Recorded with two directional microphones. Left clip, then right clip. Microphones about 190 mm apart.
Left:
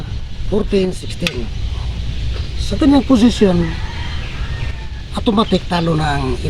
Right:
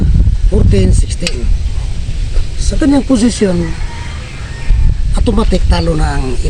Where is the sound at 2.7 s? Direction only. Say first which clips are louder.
Right 1 dB; centre (ahead or behind).